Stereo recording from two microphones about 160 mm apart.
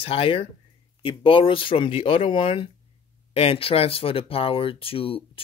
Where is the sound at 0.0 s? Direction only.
35° left (ahead or behind).